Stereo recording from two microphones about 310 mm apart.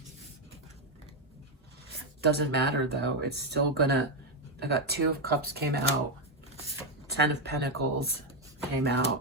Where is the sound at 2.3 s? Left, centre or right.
Right.